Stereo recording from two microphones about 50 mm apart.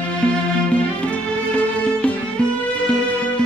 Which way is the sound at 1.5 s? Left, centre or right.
Left.